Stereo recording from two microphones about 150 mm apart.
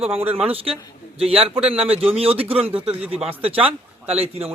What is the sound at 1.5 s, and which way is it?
Speech, 5° right (ahead or behind).